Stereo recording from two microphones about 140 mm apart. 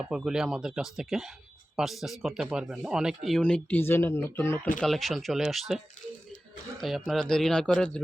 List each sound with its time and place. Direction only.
0.0 s speech: 5° right (ahead or behind)
3.2 s speech: 5° left (ahead or behind)
4.8 s speech: centre (ahead or behind)